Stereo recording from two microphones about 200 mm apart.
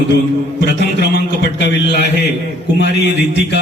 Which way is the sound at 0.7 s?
55° left (ahead or behind).